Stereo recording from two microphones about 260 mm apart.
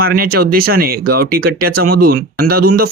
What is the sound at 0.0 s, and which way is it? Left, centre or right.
Speech, right.